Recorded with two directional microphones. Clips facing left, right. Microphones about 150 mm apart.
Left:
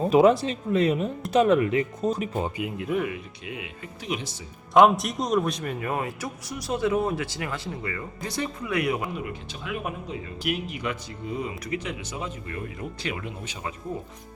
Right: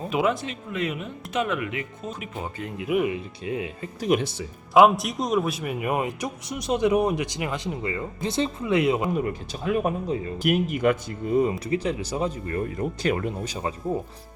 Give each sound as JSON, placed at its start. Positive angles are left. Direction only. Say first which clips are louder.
{"t": 0.1, "sound": "speech", "louder": "left 6 dB", "side_deg": 35}
{"t": 2.6, "sound": "speech", "louder": "left 3 dB", "side_deg": 5}
{"t": 3.4, "sound": "speech", "louder": "right 7 dB", "side_deg": -35}
{"t": 4.1, "sound": "speech", "louder": "right 9 dB", "side_deg": -60}
{"t": 4.7, "sound": "a man's voice", "louder": "right 1 dB", "side_deg": 0}
{"t": 9.1, "sound": "speech", "louder": "right 7 dB", "side_deg": -40}
{"t": 11.6, "sound": "speech", "louder": "right 6 dB", "side_deg": -35}